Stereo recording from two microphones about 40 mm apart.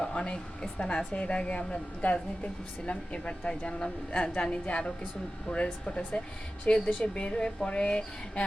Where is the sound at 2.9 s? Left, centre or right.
Left.